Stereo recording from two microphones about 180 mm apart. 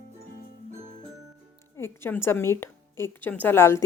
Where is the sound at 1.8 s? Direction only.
15° left (ahead or behind).